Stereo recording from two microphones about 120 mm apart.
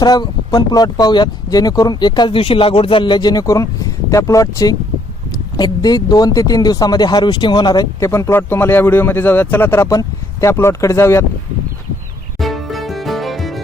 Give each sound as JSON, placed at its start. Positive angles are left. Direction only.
{"t": 0.0, "sound": "speech", "side_deg": 35}
{"t": 12.4, "sound": "music", "side_deg": 0}